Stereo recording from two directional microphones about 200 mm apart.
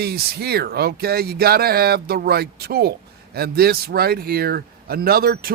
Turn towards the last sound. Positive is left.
turn(degrees=-50)  # may be behind; listen again after turning